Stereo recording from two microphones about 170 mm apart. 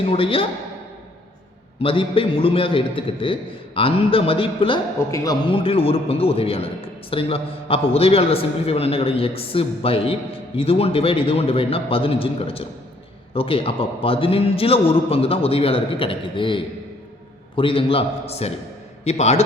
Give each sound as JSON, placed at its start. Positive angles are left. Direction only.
{"t": 0.0, "sound": "a man's voice", "side_deg": 35}
{"t": 1.8, "sound": "a man's voice", "side_deg": 30}